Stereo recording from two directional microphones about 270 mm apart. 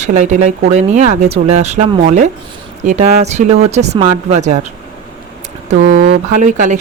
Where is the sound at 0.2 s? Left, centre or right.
Right.